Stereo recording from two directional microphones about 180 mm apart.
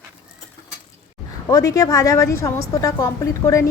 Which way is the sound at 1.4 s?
20° left (ahead or behind).